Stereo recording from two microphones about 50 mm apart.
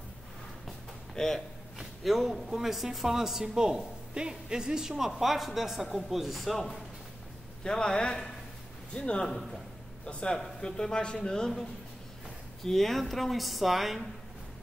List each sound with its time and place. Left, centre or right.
1.1 s speech: centre
7.6 s a man's voice: centre
12.6 s speech: centre